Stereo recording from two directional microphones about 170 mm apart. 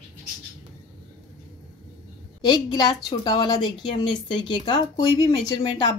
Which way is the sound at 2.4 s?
25° left (ahead or behind).